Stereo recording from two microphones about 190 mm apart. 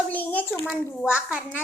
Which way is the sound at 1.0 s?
5° right (ahead or behind).